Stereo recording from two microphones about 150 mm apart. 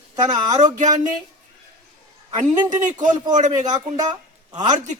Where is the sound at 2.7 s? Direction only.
55° right (ahead or behind).